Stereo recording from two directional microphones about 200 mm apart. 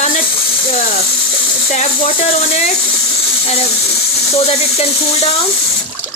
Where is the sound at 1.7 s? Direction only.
30° left (ahead or behind).